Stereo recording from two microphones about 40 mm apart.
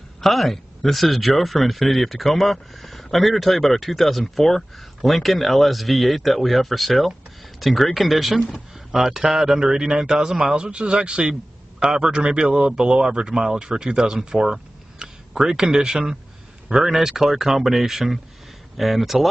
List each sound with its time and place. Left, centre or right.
0.2 s speech: centre
10.5 s speech: right; by 19.1 s centre